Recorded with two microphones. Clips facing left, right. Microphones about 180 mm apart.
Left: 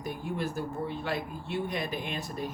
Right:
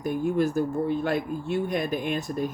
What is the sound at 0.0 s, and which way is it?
Speech, 50° right (ahead or behind).